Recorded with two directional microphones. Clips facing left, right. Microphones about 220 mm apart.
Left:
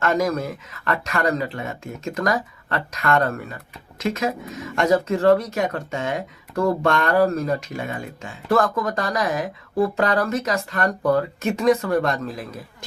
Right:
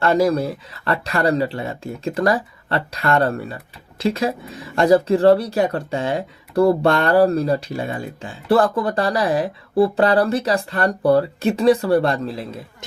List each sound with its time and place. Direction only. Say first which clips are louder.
0.0 s speech: right 4 dB; 30° right (ahead or behind)